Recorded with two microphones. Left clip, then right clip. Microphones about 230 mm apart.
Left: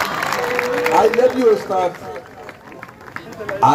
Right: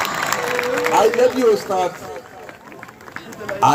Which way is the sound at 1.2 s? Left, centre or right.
Right.